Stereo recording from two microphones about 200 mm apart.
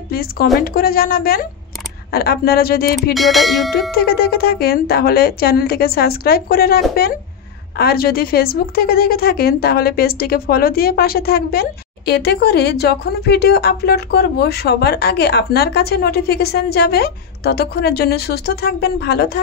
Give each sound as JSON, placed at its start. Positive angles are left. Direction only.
{"t": 0.1, "sound": "a woman's voice", "side_deg": 50}
{"t": 3.2, "sound": "music", "side_deg": 0}
{"t": 3.9, "sound": "a woman's voice", "side_deg": 50}